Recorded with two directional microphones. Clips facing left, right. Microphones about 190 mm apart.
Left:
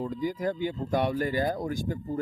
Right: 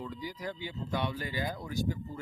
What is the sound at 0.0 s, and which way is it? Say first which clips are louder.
Speech: left 10 dB; 45° left (ahead or behind).